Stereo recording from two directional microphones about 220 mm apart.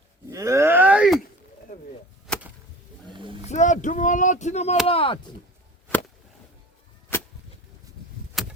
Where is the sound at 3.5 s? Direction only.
35° left (ahead or behind).